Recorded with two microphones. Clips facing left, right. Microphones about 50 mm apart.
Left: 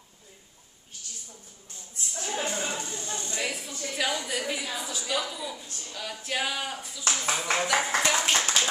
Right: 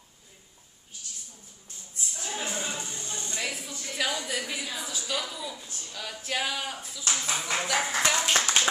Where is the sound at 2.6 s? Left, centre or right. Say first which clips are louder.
Left 2 dB; left.